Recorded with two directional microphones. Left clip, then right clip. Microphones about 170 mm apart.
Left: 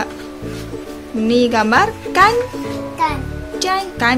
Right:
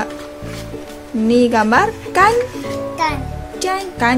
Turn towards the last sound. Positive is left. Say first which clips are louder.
# left 1 dB
turn(degrees=-5)  # may be behind; listen again after turning